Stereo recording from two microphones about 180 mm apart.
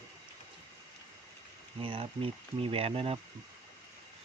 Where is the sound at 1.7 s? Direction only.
30° right (ahead or behind).